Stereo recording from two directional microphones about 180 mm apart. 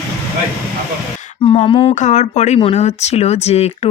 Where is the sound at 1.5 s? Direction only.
30° left (ahead or behind).